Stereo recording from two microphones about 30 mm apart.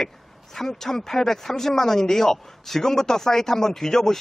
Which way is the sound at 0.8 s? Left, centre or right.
Centre.